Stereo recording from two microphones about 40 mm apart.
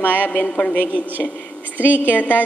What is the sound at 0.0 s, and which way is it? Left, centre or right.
Speech, left.